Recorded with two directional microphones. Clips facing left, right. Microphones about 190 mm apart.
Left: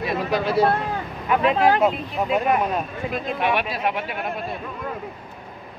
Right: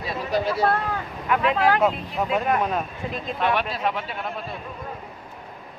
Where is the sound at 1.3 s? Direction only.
25° left (ahead or behind).